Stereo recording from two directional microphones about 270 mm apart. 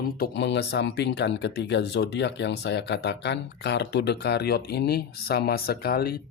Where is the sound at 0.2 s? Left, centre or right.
Left.